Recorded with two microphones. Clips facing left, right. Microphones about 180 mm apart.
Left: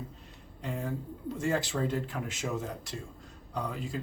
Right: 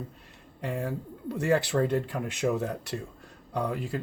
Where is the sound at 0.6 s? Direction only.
65° right (ahead or behind).